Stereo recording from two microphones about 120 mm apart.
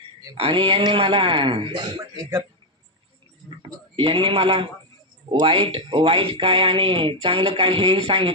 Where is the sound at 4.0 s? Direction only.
45° right (ahead or behind).